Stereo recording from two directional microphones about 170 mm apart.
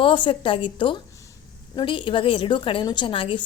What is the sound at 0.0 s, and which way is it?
A woman's voice, 30° left (ahead or behind).